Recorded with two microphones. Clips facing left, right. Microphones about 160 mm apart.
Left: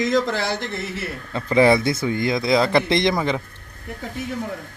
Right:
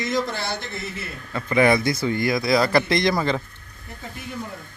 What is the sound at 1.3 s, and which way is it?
Speech, 25° left (ahead or behind).